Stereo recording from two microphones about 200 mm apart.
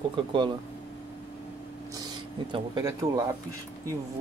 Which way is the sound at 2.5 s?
20° right (ahead or behind).